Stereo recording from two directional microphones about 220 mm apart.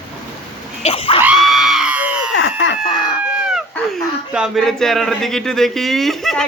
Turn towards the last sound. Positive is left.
turn(degrees=0)  # may be behind; listen again after turning